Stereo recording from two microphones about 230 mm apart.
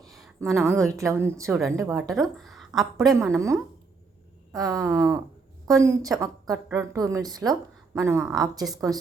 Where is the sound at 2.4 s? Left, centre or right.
Centre.